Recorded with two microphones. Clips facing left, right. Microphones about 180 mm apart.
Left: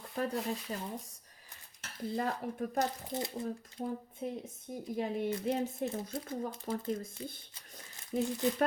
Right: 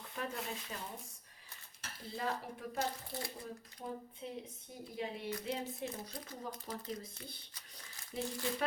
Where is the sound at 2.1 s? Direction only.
50° left (ahead or behind).